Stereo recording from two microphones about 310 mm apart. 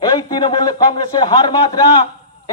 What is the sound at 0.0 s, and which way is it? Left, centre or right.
A man's voice, centre.